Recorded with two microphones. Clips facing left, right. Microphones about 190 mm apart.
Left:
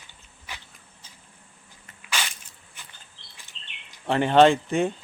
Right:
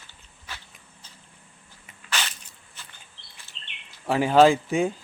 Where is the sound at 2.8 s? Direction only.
15° left (ahead or behind).